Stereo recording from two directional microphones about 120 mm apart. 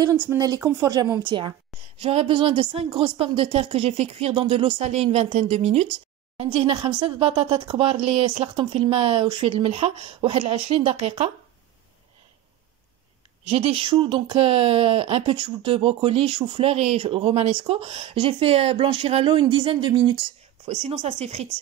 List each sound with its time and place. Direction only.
0.6 s speech: 20° right (ahead or behind)
1.2 s a woman's voice: 40° right (ahead or behind)
2.0 s a woman's voice: 50° right (ahead or behind)
13.5 s a woman's voice: 55° right (ahead or behind)